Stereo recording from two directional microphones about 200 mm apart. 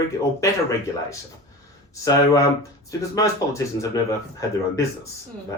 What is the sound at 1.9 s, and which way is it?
Speech, 15° left (ahead or behind).